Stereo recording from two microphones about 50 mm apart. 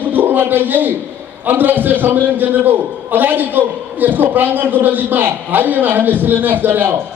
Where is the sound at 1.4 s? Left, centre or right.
Right.